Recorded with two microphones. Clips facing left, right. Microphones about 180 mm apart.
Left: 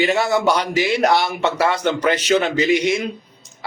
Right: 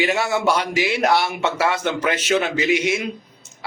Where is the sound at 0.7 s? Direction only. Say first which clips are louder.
Left 3 dB; 35° left (ahead or behind).